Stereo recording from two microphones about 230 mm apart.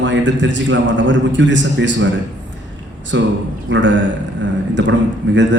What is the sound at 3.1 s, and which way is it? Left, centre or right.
Speech, right.